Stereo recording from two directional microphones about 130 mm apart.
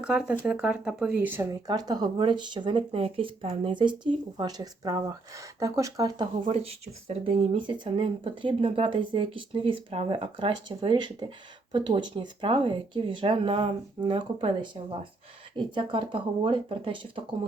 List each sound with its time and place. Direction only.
0.0 s speech: 5° right (ahead or behind); by 6.2 s 30° right (ahead or behind)
6.4 s speech: 50° right (ahead or behind)